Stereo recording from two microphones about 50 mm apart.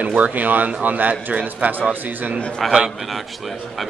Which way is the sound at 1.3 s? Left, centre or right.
Right.